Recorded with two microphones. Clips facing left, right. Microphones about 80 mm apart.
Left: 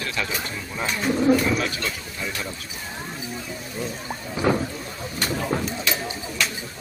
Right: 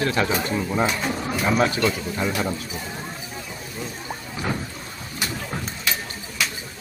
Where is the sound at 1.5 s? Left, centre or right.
Right.